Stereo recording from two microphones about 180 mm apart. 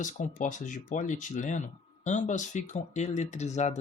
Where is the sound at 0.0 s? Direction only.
45° left (ahead or behind).